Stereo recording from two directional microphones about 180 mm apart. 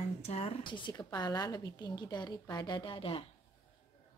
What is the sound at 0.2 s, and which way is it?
A woman's voice, 35° left (ahead or behind).